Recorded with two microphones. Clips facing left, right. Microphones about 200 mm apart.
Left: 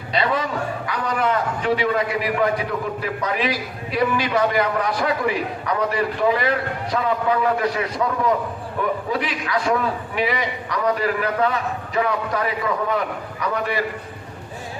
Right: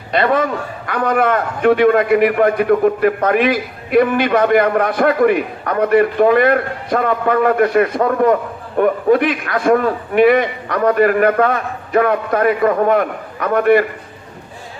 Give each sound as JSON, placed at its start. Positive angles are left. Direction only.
{"t": 0.1, "sound": "a man's voice", "side_deg": -55}